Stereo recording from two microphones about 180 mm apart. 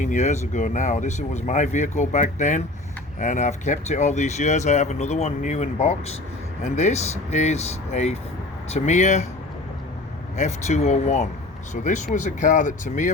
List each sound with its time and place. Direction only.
0.0 s speech: 45° left (ahead or behind)
10.3 s speech: 40° left (ahead or behind)